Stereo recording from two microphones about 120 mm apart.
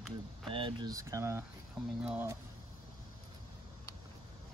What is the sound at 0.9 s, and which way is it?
Speech, 25° right (ahead or behind).